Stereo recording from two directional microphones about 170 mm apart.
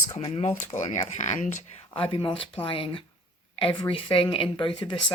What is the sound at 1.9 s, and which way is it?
Speech, 30° left (ahead or behind).